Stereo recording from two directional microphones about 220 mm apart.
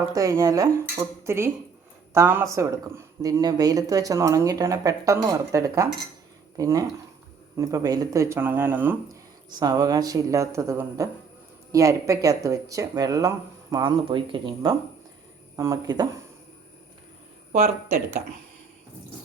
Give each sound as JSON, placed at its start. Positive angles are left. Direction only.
{"t": 0.1, "sound": "speech", "side_deg": -15}
{"t": 17.5, "sound": "speech", "side_deg": -30}